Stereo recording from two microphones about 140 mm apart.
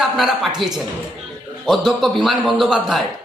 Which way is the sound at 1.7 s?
Centre (ahead or behind).